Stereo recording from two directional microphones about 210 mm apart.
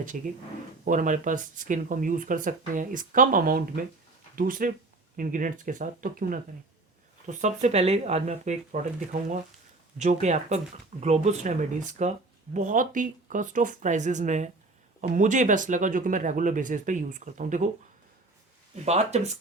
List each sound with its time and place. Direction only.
0.1 s speech: 40° right (ahead or behind)
10.0 s speech: 35° right (ahead or behind)
18.9 s speech: 30° right (ahead or behind)